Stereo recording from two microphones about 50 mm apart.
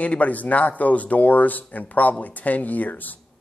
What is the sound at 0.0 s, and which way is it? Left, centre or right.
A man's voice, left.